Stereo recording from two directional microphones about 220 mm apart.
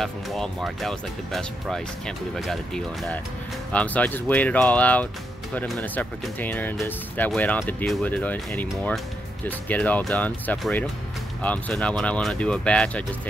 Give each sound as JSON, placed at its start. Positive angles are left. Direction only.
{"t": 0.0, "sound": "speech", "side_deg": 0}